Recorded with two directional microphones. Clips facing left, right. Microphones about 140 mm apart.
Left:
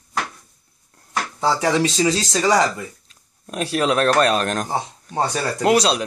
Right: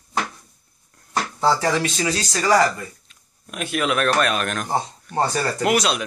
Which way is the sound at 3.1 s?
35° left (ahead or behind).